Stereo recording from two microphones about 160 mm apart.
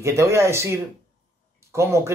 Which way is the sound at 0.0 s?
20° right (ahead or behind).